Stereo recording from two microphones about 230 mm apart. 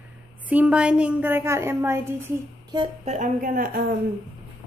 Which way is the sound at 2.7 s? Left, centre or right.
Right.